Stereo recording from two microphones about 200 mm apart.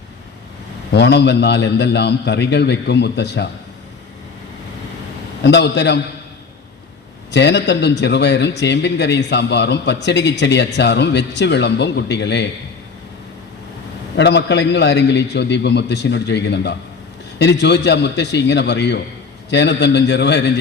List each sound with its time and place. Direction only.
0.9 s speech: 60° left (ahead or behind)
5.4 s speech: 60° left (ahead or behind)
7.3 s speech: 60° left (ahead or behind)
14.2 s speech: 60° left (ahead or behind)